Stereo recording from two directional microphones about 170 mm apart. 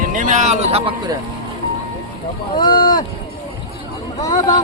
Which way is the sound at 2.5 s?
25° left (ahead or behind).